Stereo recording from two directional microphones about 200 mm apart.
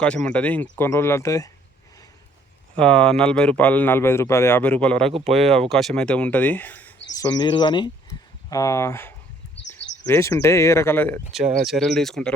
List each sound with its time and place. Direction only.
0.0 s speech: 5° left (ahead or behind)
2.7 s speech: 5° left (ahead or behind)
5.0 s speech: 30° right (ahead or behind)
5.6 s speech: centre (ahead or behind)
7.2 s speech: 20° left (ahead or behind); by 12.3 s centre (ahead or behind)